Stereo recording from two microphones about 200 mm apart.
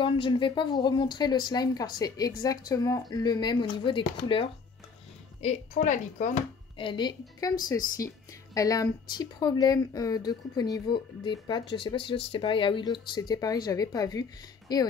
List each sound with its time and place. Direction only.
0.0 s speech: 25° left (ahead or behind)
5.4 s speech: 35° left (ahead or behind)
6.8 s speech: 25° left (ahead or behind)
8.5 s speech: 15° left (ahead or behind)